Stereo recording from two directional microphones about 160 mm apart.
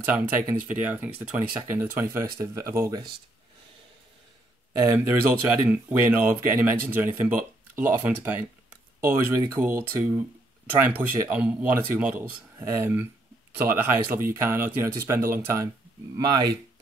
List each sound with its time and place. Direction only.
0.0 s speech: 10° right (ahead or behind)
4.7 s speech: 15° right (ahead or behind)